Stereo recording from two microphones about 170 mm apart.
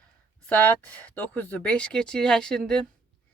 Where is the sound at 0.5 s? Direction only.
10° left (ahead or behind).